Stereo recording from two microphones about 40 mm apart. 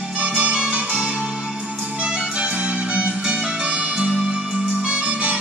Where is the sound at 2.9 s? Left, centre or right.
Right.